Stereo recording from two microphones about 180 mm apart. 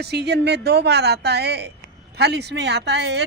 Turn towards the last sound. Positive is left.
turn(degrees=-70)  # may be behind; listen again after turning